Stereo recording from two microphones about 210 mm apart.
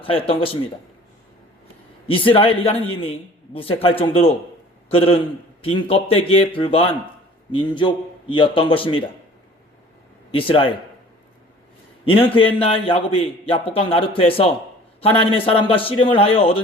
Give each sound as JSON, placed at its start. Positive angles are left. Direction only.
{"t": 0.0, "sound": "speech", "side_deg": 25}
{"t": 2.0, "sound": "speech", "side_deg": 25}
{"t": 10.3, "sound": "speech", "side_deg": 25}
{"t": 12.5, "sound": "speech", "side_deg": 25}